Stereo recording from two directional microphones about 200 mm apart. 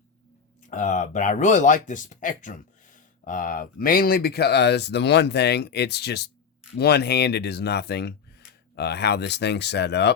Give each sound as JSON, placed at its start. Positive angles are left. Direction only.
{"t": 0.7, "sound": "speech", "side_deg": 40}